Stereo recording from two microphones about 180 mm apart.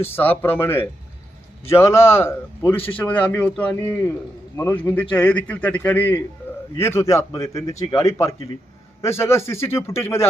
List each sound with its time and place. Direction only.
0.0 s speech: 10° left (ahead or behind)